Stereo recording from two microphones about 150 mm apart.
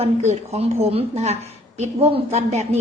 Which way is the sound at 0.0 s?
45° right (ahead or behind).